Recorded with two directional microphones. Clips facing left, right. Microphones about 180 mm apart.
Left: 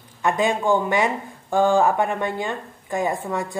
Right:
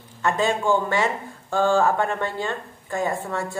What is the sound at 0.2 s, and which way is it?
Speech, 15° left (ahead or behind).